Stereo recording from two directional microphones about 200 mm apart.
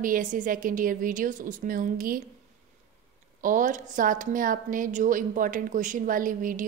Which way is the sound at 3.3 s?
40° right (ahead or behind).